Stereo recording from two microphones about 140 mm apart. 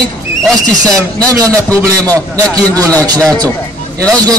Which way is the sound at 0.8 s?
25° right (ahead or behind).